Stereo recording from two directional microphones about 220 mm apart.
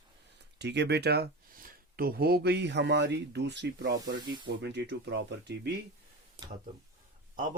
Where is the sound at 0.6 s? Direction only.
50° right (ahead or behind).